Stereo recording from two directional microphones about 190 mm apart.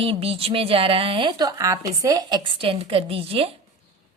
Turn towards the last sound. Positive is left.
turn(degrees=-30)  # may be behind; listen again after turning